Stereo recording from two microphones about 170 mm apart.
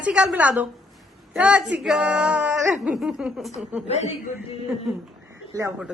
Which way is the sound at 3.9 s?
40° left (ahead or behind).